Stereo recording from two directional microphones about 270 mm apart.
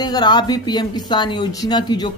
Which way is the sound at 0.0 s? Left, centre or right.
Centre.